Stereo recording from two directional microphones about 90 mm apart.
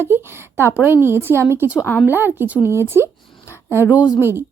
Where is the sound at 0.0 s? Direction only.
25° right (ahead or behind).